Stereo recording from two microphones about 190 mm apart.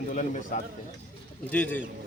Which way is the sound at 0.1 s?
40° left (ahead or behind).